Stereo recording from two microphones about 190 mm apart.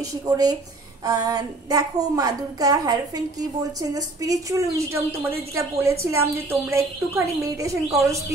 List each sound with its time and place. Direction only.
0.0 s a woman's voice: 20° right (ahead or behind)